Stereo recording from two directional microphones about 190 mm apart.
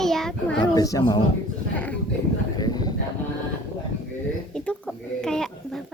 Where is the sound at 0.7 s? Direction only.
20° left (ahead or behind).